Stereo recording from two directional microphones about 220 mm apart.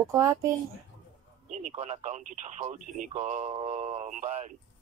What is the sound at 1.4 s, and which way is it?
Speech, 35° right (ahead or behind).